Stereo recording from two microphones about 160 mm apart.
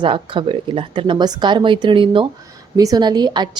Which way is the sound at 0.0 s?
30° right (ahead or behind).